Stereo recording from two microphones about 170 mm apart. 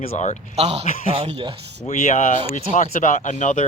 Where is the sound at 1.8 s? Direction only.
45° left (ahead or behind).